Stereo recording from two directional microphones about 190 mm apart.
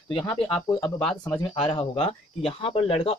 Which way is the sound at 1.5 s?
30° left (ahead or behind).